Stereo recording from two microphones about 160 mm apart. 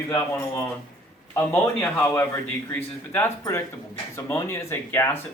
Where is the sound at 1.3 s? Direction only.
15° left (ahead or behind).